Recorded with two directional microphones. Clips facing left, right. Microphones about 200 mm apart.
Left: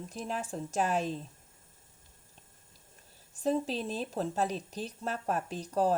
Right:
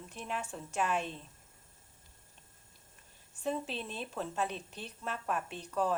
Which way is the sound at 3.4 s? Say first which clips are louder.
Left 6 dB; 35° left (ahead or behind).